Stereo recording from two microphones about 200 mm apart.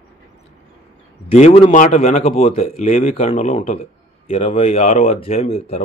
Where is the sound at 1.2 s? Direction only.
30° left (ahead or behind).